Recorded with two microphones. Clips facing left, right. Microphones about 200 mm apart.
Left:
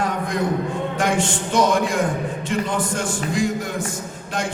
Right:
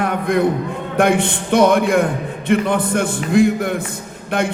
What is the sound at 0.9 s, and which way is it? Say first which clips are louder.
A man's voice: right 8 dB; 60° right (ahead or behind).